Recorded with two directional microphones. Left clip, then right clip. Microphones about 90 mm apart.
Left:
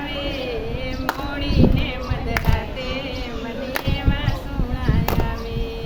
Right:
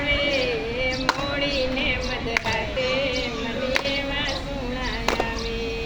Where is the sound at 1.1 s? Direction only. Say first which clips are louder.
Right 2 dB; 35° left (ahead or behind).